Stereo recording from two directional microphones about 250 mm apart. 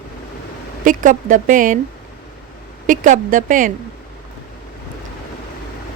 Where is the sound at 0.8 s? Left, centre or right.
Right.